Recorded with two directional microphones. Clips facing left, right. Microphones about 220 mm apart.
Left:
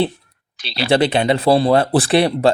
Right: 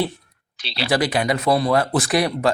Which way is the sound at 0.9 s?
25° left (ahead or behind).